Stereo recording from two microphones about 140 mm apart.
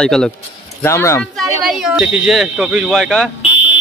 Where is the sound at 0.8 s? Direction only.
20° left (ahead or behind).